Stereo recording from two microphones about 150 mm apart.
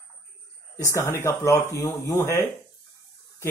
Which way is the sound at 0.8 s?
20° left (ahead or behind).